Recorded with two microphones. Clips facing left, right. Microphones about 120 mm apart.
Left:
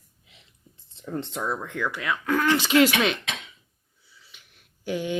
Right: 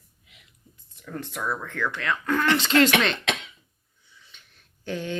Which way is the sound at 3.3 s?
70° right (ahead or behind).